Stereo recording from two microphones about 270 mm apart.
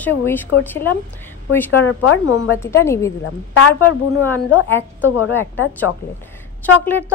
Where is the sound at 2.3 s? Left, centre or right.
Left.